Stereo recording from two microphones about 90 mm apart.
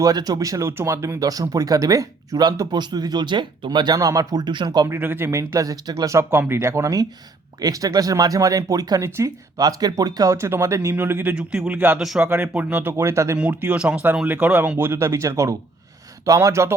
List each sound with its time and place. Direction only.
0.0 s speech: 45° right (ahead or behind)
0.7 s speech: 30° right (ahead or behind); by 4.9 s 55° right (ahead or behind)
4.9 s speech: 25° right (ahead or behind); by 9.0 s 40° right (ahead or behind)
9.0 s speech: 30° right (ahead or behind)
9.6 s speech: 45° right (ahead or behind)
10.3 s speech: 30° right (ahead or behind)
10.9 s speech: 20° right (ahead or behind)
11.9 s speech: 5° right (ahead or behind)
12.2 s speech: 20° right (ahead or behind)
12.9 s speech: 30° right (ahead or behind)
13.3 s speech: 20° right (ahead or behind)